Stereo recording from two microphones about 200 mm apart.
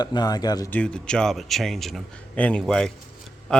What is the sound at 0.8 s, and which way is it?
A man's voice, 5° left (ahead or behind).